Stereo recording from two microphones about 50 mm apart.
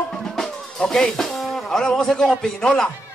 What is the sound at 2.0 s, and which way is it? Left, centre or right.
Speech, centre.